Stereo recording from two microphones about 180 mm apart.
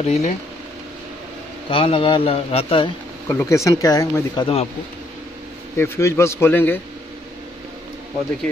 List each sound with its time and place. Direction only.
0.0 s speech: 40° left (ahead or behind)
1.7 s speech: 30° left (ahead or behind)
3.3 s speech: 15° left (ahead or behind)
5.8 s speech: 15° left (ahead or behind)